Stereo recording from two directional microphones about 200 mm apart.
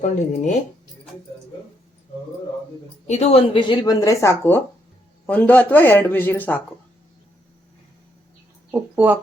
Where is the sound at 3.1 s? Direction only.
30° left (ahead or behind); by 6.6 s 10° left (ahead or behind).